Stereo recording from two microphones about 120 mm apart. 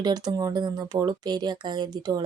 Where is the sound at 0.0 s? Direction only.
30° right (ahead or behind).